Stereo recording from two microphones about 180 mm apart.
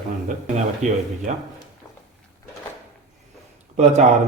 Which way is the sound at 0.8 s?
45° right (ahead or behind).